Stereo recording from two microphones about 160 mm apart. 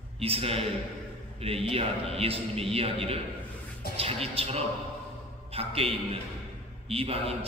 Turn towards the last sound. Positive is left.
turn(degrees=-35)  # may be behind; listen again after turning